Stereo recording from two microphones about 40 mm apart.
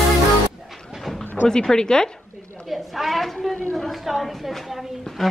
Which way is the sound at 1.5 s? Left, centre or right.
Centre.